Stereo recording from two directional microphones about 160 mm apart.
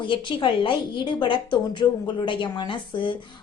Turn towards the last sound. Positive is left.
turn(degrees=30)  # may be behind; listen again after turning